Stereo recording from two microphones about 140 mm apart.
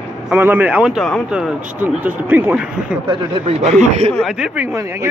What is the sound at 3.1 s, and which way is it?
Speech, 50° right (ahead or behind).